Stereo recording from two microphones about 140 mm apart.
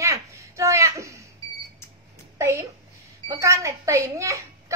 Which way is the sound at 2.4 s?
20° right (ahead or behind).